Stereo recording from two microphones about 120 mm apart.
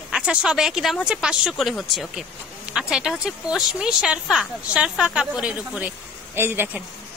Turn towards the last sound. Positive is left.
turn(degrees=-20)  # may be behind; listen again after turning